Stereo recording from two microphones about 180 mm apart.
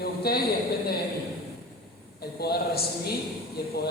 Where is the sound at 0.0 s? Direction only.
60° left (ahead or behind).